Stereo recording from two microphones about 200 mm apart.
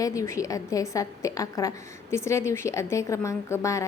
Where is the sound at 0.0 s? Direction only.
15° left (ahead or behind).